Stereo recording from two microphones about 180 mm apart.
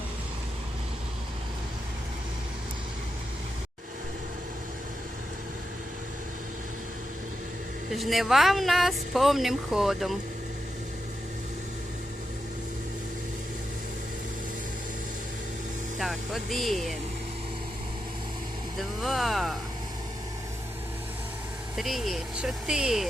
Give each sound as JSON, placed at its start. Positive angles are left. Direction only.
{"t": 7.9, "sound": "speech", "side_deg": 0}
{"t": 16.0, "sound": "vehicle", "side_deg": 0}
{"t": 18.8, "sound": "speech", "side_deg": 0}
{"t": 21.8, "sound": "speech", "side_deg": 0}